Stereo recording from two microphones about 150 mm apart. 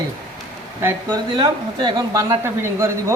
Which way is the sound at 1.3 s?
35° right (ahead or behind).